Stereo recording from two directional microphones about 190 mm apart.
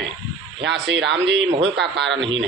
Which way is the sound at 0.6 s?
65° right (ahead or behind).